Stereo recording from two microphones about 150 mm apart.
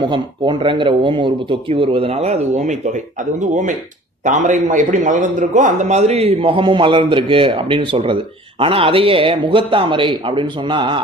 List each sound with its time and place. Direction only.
0.1 s a man's voice: 30° right (ahead or behind)
4.2 s a man's voice: 55° right (ahead or behind); by 11.0 s 35° right (ahead or behind)